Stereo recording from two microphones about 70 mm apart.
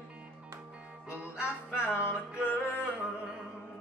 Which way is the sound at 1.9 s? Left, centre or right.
Centre.